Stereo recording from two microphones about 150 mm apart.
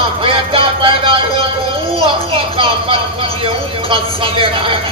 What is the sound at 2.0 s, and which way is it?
Speech, 35° right (ahead or behind).